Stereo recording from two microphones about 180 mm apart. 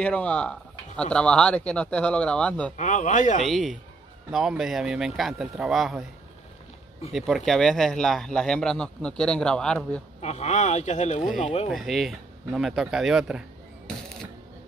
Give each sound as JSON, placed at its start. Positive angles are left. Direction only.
{"t": 0.0, "sound": "a man's voice", "side_deg": 5}
{"t": 2.8, "sound": "a man's voice", "side_deg": 45}
{"t": 3.4, "sound": "a man's voice", "side_deg": 0}
{"t": 7.1, "sound": "a man's voice", "side_deg": 0}
{"t": 10.2, "sound": "speech", "side_deg": 40}
{"t": 11.7, "sound": "a man's voice", "side_deg": 0}